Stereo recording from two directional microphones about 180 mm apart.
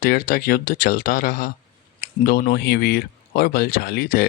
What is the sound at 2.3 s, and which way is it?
A man's voice, 65° left (ahead or behind).